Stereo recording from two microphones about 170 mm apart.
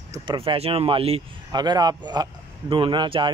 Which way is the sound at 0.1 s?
30° right (ahead or behind).